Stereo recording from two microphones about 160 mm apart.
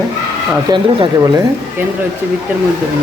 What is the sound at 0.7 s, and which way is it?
Speech, 25° right (ahead or behind).